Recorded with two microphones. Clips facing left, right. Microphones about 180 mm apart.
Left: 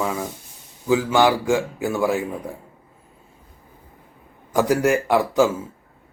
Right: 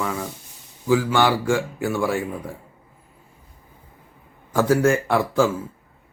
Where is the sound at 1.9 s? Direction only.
Centre (ahead or behind).